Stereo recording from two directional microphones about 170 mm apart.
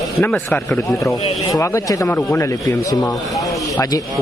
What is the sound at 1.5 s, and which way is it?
Speech, 20° left (ahead or behind).